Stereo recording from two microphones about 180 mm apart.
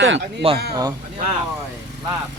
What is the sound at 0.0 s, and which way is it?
Speech, 80° right.